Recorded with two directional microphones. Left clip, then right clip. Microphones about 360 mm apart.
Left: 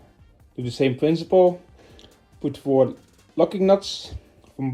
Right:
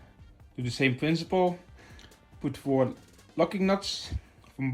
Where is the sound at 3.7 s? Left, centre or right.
Right.